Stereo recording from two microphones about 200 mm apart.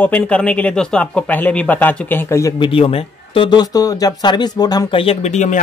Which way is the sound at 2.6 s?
30° left (ahead or behind).